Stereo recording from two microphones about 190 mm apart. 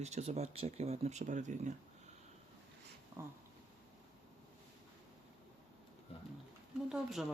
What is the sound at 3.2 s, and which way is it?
Speech, 15° right (ahead or behind).